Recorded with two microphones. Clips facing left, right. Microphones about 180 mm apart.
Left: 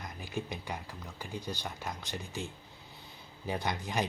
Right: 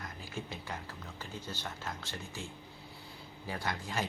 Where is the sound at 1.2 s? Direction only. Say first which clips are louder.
Left 4 dB; 15° left (ahead or behind).